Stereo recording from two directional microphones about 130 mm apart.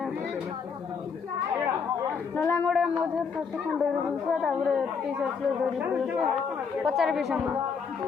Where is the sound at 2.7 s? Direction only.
Centre (ahead or behind).